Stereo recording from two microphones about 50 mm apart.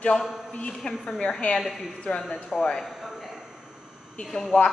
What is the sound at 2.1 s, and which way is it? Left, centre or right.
Speech, left.